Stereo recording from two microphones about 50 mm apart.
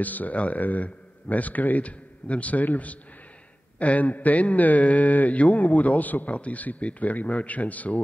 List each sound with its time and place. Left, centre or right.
0.0 s a man's voice: left